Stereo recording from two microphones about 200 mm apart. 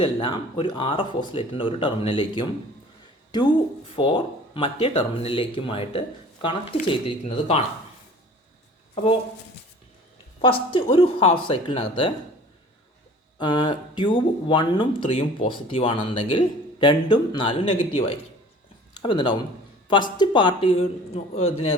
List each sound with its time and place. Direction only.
0.0 s speech: 25° left (ahead or behind)
10.4 s speech: 25° left (ahead or behind)
13.4 s speech: 25° left (ahead or behind)
19.0 s speech: 25° left (ahead or behind)